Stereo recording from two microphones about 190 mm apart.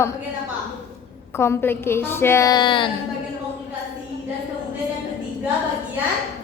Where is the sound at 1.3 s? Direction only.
10° left (ahead or behind).